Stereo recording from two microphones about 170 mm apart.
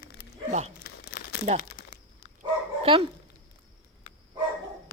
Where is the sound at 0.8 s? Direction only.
80° left.